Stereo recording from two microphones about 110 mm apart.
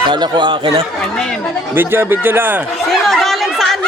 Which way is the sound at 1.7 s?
20° right (ahead or behind).